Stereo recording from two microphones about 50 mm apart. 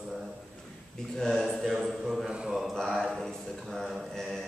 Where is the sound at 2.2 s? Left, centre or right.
Centre.